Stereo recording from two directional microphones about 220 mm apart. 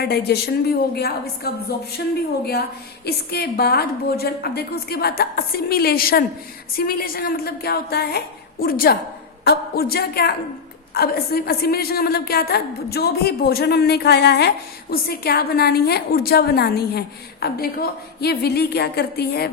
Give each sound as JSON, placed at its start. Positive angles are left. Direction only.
{"t": 0.0, "sound": "a woman's voice", "side_deg": 45}
{"t": 3.1, "sound": "a woman's voice", "side_deg": 45}